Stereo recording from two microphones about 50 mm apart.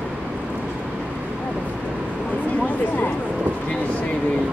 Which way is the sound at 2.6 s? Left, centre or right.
Left.